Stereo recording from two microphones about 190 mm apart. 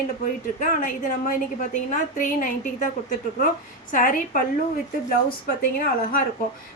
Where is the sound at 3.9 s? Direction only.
45° left (ahead or behind).